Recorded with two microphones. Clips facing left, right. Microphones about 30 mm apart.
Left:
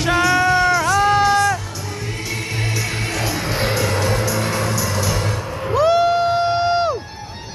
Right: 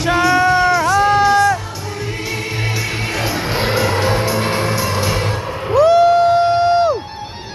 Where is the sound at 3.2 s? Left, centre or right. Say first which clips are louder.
Right 3 dB; right.